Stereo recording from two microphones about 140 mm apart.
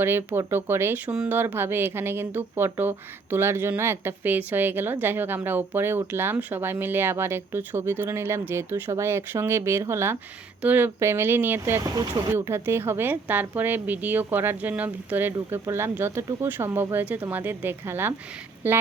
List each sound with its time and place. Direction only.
0.0 s speech: 15° right (ahead or behind)